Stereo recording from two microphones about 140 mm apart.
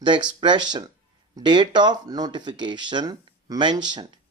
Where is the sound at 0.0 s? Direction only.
35° right (ahead or behind).